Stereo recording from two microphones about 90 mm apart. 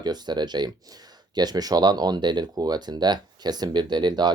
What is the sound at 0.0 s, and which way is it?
Speech, 50° right (ahead or behind).